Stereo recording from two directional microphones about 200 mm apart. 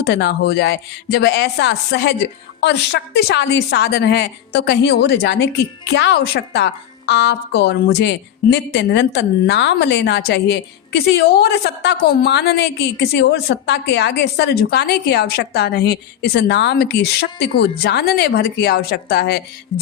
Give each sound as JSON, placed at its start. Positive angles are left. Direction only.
{"t": 0.0, "sound": "a woman's voice", "side_deg": 55}